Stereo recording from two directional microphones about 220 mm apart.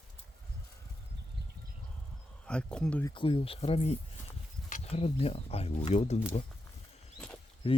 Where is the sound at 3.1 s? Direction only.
25° left (ahead or behind).